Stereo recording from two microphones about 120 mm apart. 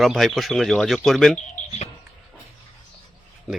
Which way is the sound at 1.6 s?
90° left.